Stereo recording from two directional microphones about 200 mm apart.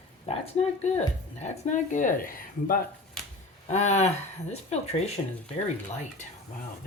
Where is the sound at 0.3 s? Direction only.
35° left (ahead or behind).